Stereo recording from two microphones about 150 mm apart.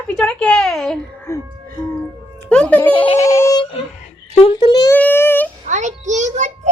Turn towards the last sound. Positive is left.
turn(degrees=-50)  # may be behind; listen again after turning